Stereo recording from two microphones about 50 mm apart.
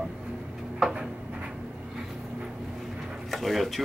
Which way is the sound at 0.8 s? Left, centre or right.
Centre.